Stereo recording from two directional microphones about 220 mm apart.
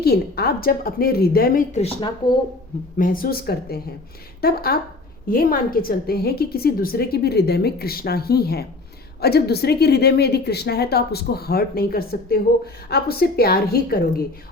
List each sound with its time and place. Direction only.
0.0 s a woman's voice: 45° left (ahead or behind); by 2.0 s 25° left (ahead or behind)
3.0 s a woman's voice: 40° left (ahead or behind)